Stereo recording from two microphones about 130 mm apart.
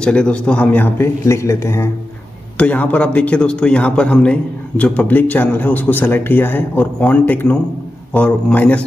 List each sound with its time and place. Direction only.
0.0 s a man's voice: 10° left (ahead or behind)
2.5 s a man's voice: 10° left (ahead or behind)